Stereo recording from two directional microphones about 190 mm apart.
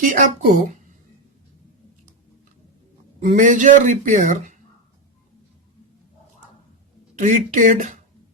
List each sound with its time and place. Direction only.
0.0 s speech: 45° right (ahead or behind)
3.2 s speech: 40° right (ahead or behind)
7.2 s speech: 40° right (ahead or behind)